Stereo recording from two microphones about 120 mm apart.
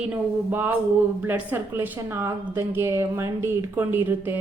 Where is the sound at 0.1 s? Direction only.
15° right (ahead or behind).